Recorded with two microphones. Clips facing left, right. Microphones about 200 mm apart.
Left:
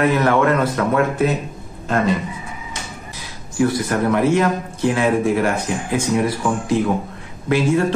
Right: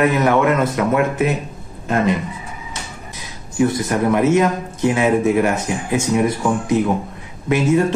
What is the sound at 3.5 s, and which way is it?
A man's voice, 20° right (ahead or behind).